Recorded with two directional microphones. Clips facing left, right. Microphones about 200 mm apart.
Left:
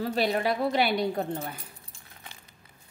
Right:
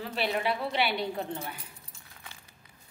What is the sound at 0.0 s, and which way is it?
Speech, 40° left (ahead or behind).